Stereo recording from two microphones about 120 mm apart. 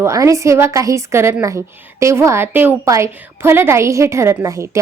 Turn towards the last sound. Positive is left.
turn(degrees=-25)  # may be behind; listen again after turning